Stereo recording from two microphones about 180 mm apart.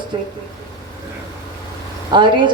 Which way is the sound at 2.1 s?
25° right (ahead or behind).